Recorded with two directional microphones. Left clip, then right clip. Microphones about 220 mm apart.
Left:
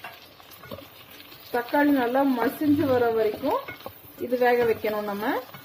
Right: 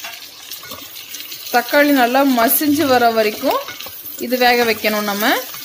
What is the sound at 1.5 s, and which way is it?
Speech, 50° right (ahead or behind).